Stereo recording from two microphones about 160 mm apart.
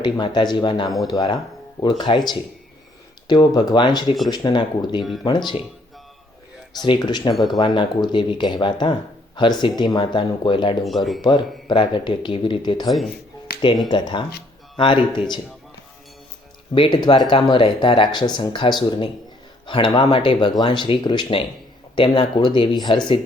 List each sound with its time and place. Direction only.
0.0 s speech: 30° left (ahead or behind)
6.7 s speech: 30° left (ahead or behind)
10.8 s speech: centre (ahead or behind)
11.2 s speech: 30° left (ahead or behind)
13.5 s music: 75° left (ahead or behind)
13.8 s speech: 30° left (ahead or behind)
16.7 s speech: 30° left (ahead or behind)